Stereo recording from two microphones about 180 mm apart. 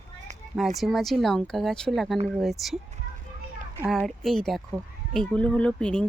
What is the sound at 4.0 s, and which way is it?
Speech, centre (ahead or behind).